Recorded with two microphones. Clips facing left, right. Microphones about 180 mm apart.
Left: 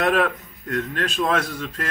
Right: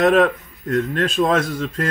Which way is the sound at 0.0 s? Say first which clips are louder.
Right 6 dB; 35° right (ahead or behind).